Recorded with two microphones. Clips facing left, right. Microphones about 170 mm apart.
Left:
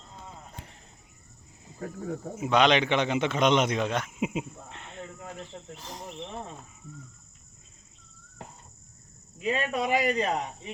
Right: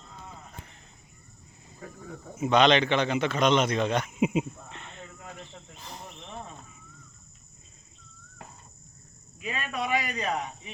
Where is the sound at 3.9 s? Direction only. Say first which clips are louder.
Right 4 dB; centre (ahead or behind).